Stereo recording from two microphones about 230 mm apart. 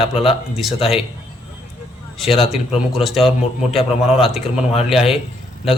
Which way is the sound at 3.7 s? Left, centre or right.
Left.